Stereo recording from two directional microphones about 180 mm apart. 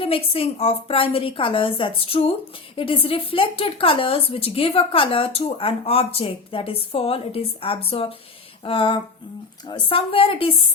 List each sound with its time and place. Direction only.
0.0 s speech: 30° left (ahead or behind)